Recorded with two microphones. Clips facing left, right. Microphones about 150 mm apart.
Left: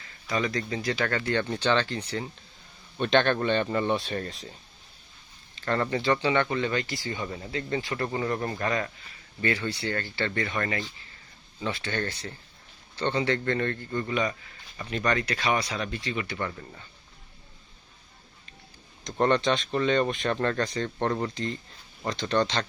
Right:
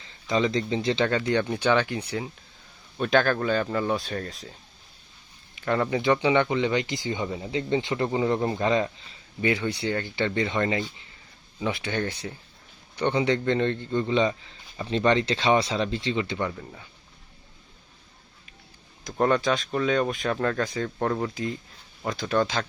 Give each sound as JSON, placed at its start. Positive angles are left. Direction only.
{"t": 0.0, "sound": "speech", "side_deg": -20}
{"t": 5.5, "sound": "speech", "side_deg": -10}
{"t": 16.5, "sound": "speech", "side_deg": -5}
{"t": 19.0, "sound": "speech", "side_deg": -5}